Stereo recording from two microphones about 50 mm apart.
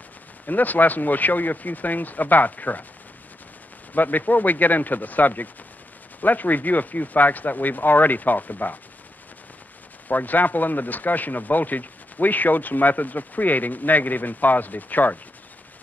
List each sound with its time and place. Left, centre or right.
0.5 s speech: left
3.9 s speech: left
10.0 s speech: left